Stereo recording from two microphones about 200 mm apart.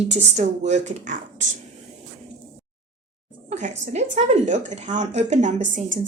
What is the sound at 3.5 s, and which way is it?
A woman's voice, 40° right (ahead or behind).